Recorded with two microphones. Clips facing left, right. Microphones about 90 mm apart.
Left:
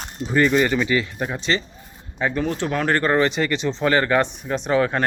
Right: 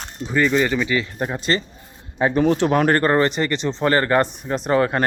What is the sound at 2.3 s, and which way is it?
Speech, 50° right (ahead or behind).